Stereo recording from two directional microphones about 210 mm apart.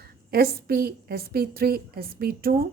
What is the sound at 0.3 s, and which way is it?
A woman's voice, 45° right (ahead or behind).